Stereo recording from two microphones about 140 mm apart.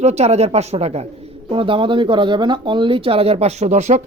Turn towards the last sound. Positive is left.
turn(degrees=-50)  # may be behind; listen again after turning